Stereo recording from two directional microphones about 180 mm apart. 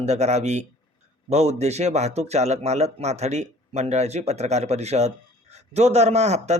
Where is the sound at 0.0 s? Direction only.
40° right (ahead or behind).